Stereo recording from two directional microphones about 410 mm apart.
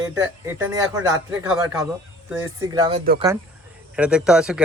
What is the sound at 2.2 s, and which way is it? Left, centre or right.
Speech, centre.